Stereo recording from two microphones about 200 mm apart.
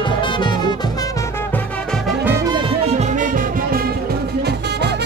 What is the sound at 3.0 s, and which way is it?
Music, 40° right (ahead or behind).